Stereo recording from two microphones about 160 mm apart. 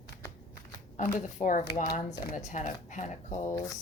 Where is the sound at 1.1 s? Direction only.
55° left (ahead or behind).